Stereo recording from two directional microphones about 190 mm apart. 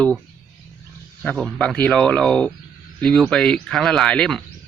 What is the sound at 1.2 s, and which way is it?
Speech, 5° left (ahead or behind).